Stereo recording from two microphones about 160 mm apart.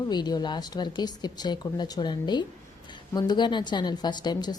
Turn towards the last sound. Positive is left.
turn(degrees=25)  # may be behind; listen again after turning